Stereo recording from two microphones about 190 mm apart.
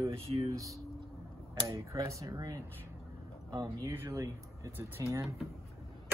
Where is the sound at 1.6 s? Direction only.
15° right (ahead or behind).